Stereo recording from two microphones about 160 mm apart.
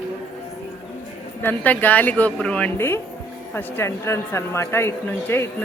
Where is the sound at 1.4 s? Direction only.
10° left (ahead or behind).